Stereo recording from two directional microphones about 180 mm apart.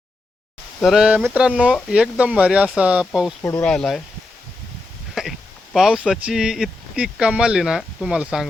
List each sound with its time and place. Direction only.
0.8 s speech: centre (ahead or behind)
5.2 s a sound: centre (ahead or behind)
5.7 s speech: 5° right (ahead or behind)